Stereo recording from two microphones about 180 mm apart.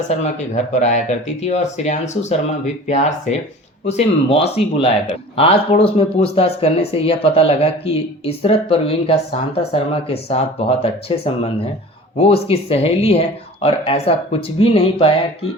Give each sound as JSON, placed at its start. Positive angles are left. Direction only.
{"t": 0.1, "sound": "speech", "side_deg": 40}